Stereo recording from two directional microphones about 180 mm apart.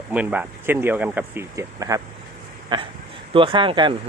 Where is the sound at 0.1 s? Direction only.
10° right (ahead or behind).